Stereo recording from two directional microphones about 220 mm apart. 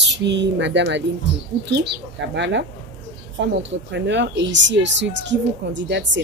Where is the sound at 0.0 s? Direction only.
50° right (ahead or behind).